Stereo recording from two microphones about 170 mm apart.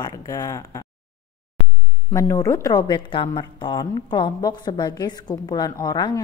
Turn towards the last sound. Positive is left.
turn(degrees=25)  # may be behind; listen again after turning